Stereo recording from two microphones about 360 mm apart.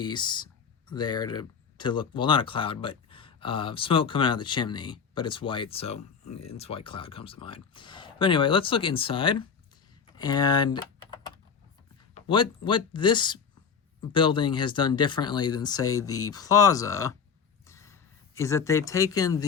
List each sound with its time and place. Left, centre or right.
0.0 s speech: centre
15.8 s speech: left
16.3 s speech: centre